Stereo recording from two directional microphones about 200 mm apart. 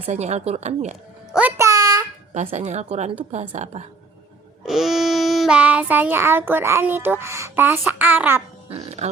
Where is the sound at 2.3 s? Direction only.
35° right (ahead or behind).